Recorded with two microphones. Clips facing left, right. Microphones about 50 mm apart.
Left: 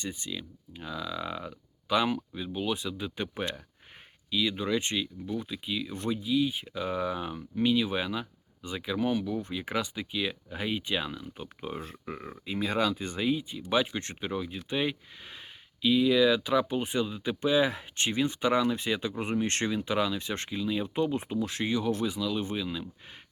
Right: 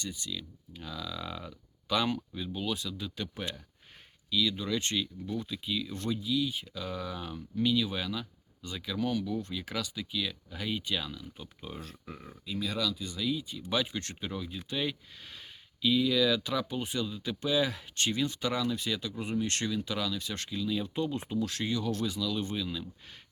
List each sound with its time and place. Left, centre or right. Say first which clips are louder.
0.0 s speech: left 2 dB; left